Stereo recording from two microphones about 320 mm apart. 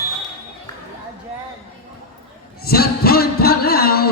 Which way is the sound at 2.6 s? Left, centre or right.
Left.